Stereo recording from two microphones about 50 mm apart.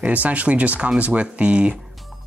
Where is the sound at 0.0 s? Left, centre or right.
Right.